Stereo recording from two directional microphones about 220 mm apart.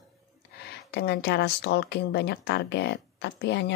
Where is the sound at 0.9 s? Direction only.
50° left (ahead or behind).